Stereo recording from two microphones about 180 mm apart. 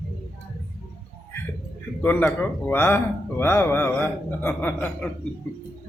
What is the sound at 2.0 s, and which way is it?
Speech, 10° left (ahead or behind).